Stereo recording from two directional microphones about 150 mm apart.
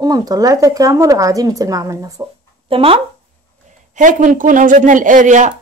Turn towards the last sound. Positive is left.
turn(degrees=-55)  # may be behind; listen again after turning